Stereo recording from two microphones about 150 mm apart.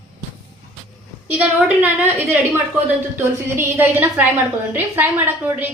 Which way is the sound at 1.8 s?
10° right (ahead or behind).